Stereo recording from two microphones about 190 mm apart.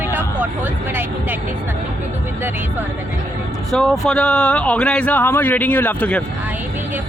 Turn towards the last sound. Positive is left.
turn(degrees=10)  # may be behind; listen again after turning